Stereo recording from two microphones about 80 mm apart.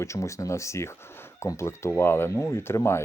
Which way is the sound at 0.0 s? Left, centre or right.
Left.